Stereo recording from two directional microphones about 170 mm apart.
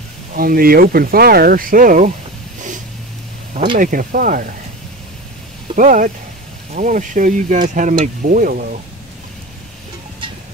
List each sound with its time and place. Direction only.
0.4 s speech: 60° right (ahead or behind)
3.7 s speech: 55° right (ahead or behind)
5.8 s speech: 50° right (ahead or behind)